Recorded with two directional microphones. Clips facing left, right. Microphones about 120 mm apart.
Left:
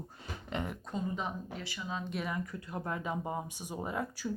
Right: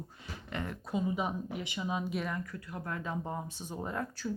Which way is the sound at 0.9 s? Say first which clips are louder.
Right 5 dB; 10° right (ahead or behind).